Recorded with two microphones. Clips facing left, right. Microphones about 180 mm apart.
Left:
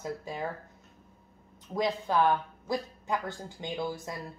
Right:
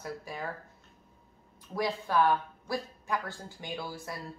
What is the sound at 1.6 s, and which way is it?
Speech, 20° left (ahead or behind).